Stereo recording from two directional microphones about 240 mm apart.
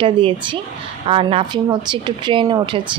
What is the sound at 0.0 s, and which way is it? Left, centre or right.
Speech, right.